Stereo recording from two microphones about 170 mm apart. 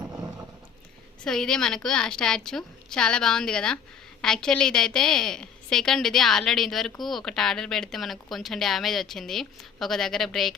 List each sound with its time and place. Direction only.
1.2 s speech: 5° left (ahead or behind)